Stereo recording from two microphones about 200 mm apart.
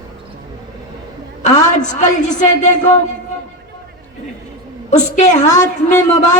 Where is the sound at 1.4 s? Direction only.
35° left (ahead or behind).